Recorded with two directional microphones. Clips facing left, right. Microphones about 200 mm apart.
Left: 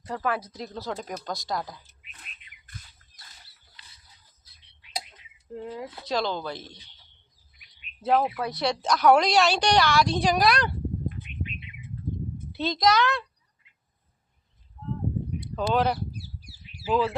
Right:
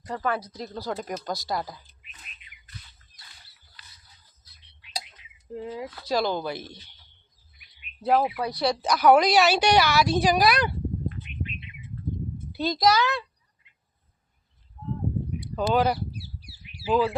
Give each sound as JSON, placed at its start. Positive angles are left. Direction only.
{"t": 0.1, "sound": "a woman's voice", "side_deg": 5}
{"t": 2.6, "sound": "a sound", "side_deg": 50}
{"t": 4.5, "sound": "tick-tock", "side_deg": 20}
{"t": 5.5, "sound": "a woman's voice", "side_deg": -5}
{"t": 6.7, "sound": "a man's voice", "side_deg": 15}
{"t": 8.0, "sound": "a woman's voice", "side_deg": -5}
{"t": 12.5, "sound": "a child's voice", "side_deg": 0}
{"t": 15.5, "sound": "a woman's voice", "side_deg": -5}
{"t": 16.1, "sound": "bird", "side_deg": 45}
{"t": 16.9, "sound": "a woman's voice", "side_deg": 0}